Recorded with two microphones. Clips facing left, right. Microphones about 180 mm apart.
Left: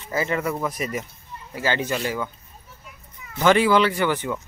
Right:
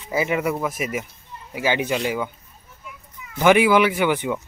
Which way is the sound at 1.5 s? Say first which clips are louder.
Right 2 dB; 15° right (ahead or behind).